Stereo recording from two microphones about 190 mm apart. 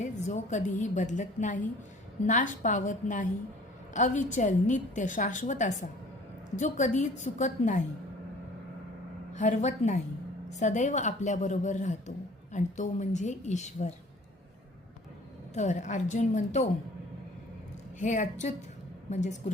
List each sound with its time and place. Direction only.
0.0 s a woman's voice: 40° left (ahead or behind)
9.3 s a woman's voice: 40° left (ahead or behind)
15.5 s a woman's voice: 40° left (ahead or behind)
18.0 s a woman's voice: 40° left (ahead or behind)